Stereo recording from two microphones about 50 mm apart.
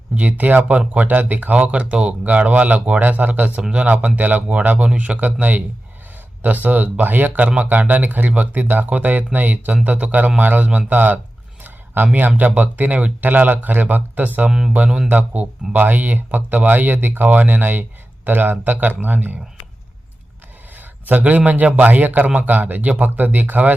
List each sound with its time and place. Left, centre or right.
0.2 s speech: right
3.6 s speech: right
14.8 s a man's voice: centre
15.1 s speech: right
20.7 s a man's voice: right